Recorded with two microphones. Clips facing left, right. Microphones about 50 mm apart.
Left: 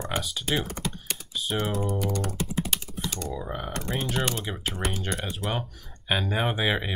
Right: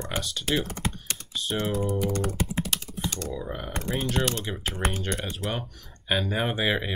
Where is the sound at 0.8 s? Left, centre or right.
Centre.